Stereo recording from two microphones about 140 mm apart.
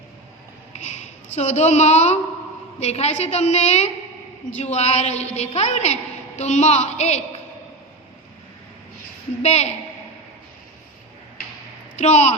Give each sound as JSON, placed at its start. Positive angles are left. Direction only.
{"t": 1.4, "sound": "a woman's voice", "side_deg": 55}
{"t": 9.4, "sound": "a woman's voice", "side_deg": 50}
{"t": 11.9, "sound": "a woman's voice", "side_deg": 55}